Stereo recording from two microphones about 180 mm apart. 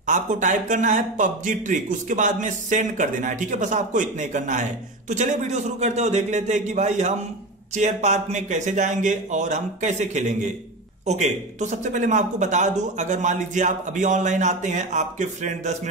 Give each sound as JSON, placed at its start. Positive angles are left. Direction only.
{"t": 0.0, "sound": "a man's voice", "side_deg": -45}